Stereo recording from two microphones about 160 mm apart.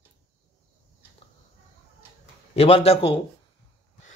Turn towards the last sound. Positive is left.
turn(degrees=35)  # may be behind; listen again after turning